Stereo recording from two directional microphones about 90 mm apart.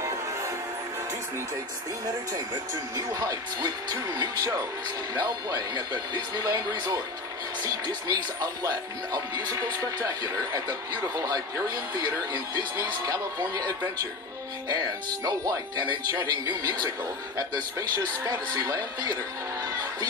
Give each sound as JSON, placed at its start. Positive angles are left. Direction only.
{"t": 3.1, "sound": "speech", "side_deg": -45}
{"t": 15.2, "sound": "speech", "side_deg": -45}
{"t": 17.7, "sound": "speech", "side_deg": -35}